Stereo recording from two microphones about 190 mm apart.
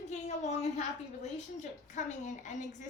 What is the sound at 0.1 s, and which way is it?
A woman's voice, 35° left (ahead or behind).